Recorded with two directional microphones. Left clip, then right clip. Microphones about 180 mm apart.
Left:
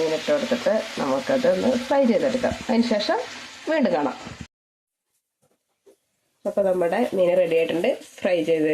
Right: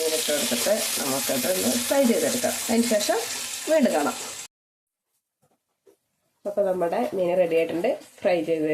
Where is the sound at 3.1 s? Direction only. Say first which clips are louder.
Left 1 dB; 25° left (ahead or behind).